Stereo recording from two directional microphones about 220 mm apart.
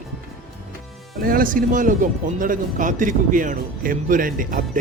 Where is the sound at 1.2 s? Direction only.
40° right (ahead or behind).